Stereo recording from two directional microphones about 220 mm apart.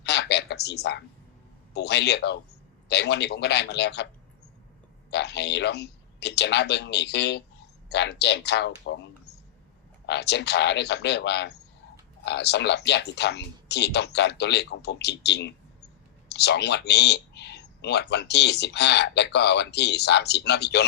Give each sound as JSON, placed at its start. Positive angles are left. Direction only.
{"t": 0.0, "sound": "a sound", "side_deg": 50}
{"t": 1.7, "sound": "speech", "side_deg": 50}
{"t": 5.1, "sound": "speech", "side_deg": 50}
{"t": 10.1, "sound": "speech", "side_deg": 50}